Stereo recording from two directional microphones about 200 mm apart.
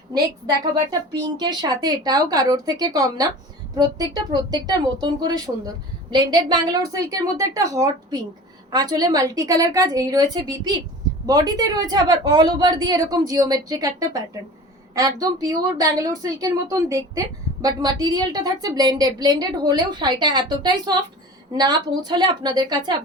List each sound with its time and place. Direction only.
0.1 s a woman's voice: 20° right (ahead or behind)